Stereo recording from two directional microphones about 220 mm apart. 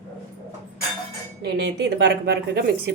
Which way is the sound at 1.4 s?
50° right (ahead or behind).